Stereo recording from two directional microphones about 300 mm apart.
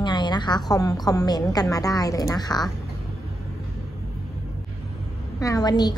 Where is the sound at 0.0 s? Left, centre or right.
Centre.